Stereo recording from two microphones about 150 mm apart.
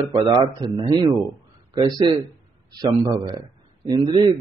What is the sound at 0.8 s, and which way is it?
A man's voice, 25° right (ahead or behind).